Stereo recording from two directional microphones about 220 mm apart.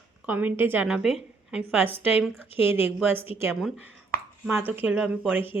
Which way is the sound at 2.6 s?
10° right (ahead or behind).